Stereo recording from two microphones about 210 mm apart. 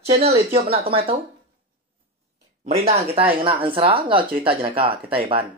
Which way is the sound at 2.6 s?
30° right (ahead or behind).